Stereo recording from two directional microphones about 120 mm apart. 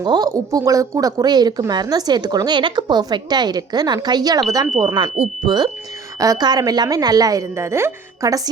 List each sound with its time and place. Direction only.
0.0 s a woman's voice: 35° right (ahead or behind)
4.9 s speech: 50° right (ahead or behind)
5.5 s a woman's voice: 35° right (ahead or behind)